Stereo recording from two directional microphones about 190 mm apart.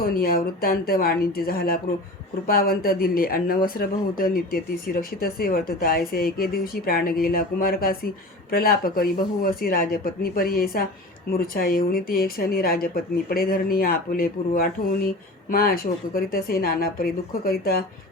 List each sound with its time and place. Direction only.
0.0 s speech: 50° left (ahead or behind)